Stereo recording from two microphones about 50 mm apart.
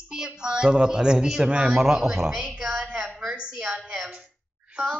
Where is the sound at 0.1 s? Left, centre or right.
Centre.